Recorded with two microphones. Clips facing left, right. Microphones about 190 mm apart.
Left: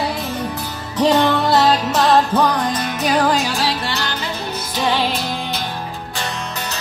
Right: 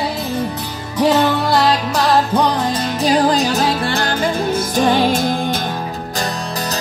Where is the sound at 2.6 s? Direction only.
30° right (ahead or behind); by 5.6 s 50° right (ahead or behind).